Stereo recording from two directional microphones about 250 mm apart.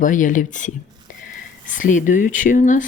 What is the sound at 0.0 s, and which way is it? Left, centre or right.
Speech, left.